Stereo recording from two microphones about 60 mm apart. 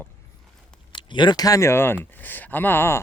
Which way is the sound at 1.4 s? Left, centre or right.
Left.